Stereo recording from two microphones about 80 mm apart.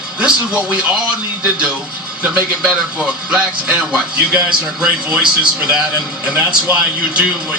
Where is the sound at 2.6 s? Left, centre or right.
Centre.